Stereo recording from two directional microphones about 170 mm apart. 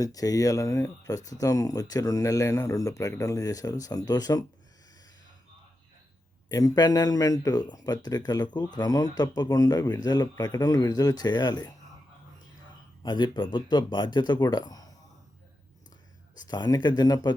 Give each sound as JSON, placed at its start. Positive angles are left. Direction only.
{"t": 0.0, "sound": "speech", "side_deg": 20}
{"t": 6.5, "sound": "speech", "side_deg": 20}
{"t": 13.0, "sound": "speech", "side_deg": 25}
{"t": 16.4, "sound": "speech", "side_deg": 25}